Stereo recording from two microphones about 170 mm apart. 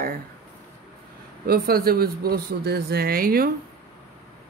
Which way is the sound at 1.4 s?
65° right (ahead or behind).